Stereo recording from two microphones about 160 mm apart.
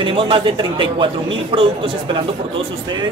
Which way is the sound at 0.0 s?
35° right (ahead or behind).